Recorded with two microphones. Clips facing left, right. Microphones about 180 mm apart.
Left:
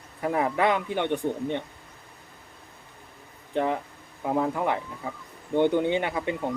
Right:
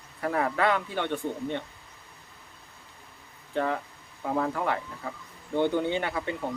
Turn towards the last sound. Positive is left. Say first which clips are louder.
# left 3 dB
turn(degrees=20)  # may be behind; listen again after turning